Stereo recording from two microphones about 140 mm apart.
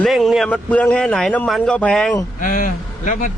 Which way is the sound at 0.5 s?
10° left (ahead or behind).